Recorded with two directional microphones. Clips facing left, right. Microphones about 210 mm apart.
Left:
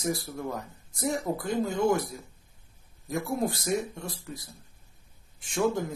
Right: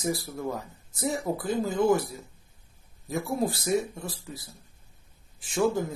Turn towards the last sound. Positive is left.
turn(degrees=0)  # may be behind; listen again after turning